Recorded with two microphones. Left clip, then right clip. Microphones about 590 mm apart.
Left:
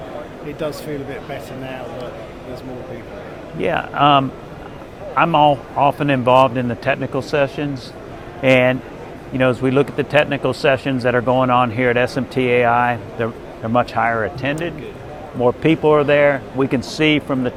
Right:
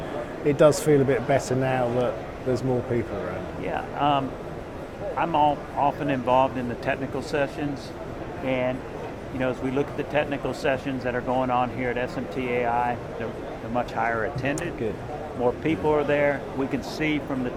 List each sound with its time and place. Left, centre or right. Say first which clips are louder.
0.4 s speech: right 8 dB; right
3.6 s speech: left 11 dB; left
8.4 s speech: left 13 dB; left